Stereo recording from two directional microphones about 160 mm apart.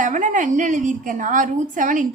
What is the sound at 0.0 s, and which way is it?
A woman's voice, 50° right (ahead or behind).